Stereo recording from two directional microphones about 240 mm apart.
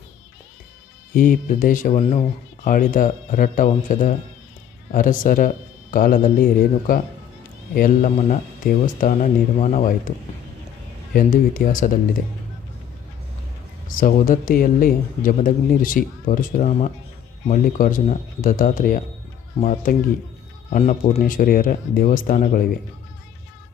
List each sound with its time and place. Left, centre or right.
1.1 s speech: left
11.1 s speech: left
13.8 s speech: left